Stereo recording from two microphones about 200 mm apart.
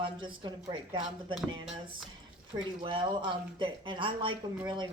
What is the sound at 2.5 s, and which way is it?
Speech, 25° right (ahead or behind).